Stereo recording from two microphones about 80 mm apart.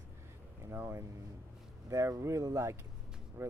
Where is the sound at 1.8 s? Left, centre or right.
Right.